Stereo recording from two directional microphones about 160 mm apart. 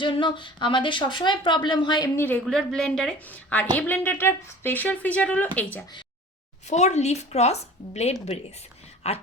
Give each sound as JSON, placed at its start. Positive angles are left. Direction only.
{"t": 0.0, "sound": "a woman's voice", "side_deg": 30}
{"t": 2.1, "sound": "a woman's voice", "side_deg": 10}
{"t": 6.7, "sound": "a woman's voice", "side_deg": 45}